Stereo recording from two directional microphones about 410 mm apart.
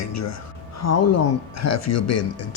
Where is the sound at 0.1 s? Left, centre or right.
Left.